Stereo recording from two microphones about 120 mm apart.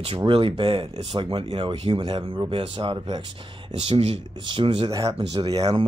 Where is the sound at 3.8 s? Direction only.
55° right (ahead or behind).